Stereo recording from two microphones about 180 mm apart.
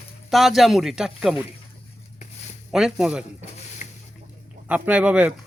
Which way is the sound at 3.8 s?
45° left (ahead or behind).